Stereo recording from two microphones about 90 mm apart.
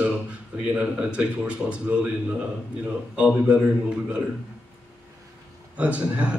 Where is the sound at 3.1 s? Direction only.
15° right (ahead or behind).